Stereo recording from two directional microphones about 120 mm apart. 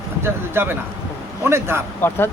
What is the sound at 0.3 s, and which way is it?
Speech, 20° right (ahead or behind).